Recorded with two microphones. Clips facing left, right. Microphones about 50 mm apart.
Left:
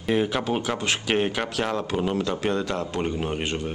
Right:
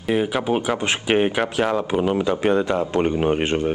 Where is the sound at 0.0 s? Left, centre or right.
Centre.